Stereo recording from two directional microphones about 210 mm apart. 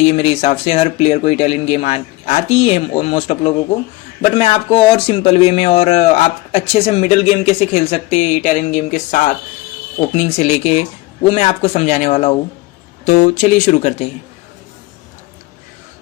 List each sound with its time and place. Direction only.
0.0 s a man's voice: 30° left (ahead or behind)